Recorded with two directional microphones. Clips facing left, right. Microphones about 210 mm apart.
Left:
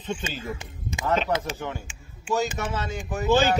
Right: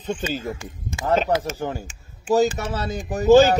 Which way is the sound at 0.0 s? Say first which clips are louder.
Right 5 dB; 40° right (ahead or behind).